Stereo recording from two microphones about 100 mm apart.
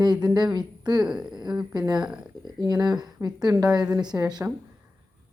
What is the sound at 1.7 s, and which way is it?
Speech, 40° right (ahead or behind).